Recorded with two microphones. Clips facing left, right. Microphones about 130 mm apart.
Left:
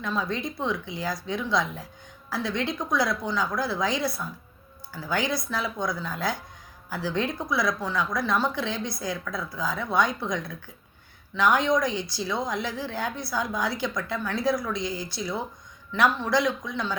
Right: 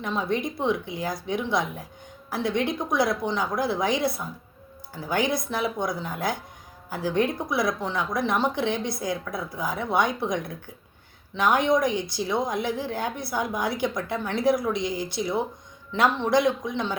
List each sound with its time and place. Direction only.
0.0 s a woman's voice: 20° right (ahead or behind)